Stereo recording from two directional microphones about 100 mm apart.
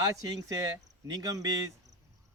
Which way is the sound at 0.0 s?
40° right (ahead or behind).